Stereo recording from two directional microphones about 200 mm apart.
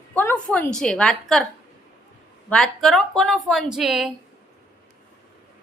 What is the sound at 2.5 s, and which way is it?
A woman's voice, centre (ahead or behind).